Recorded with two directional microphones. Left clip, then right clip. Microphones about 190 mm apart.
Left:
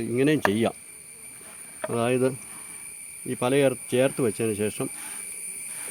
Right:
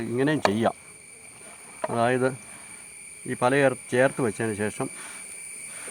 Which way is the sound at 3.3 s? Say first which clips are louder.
Right 1 dB; 10° left (ahead or behind).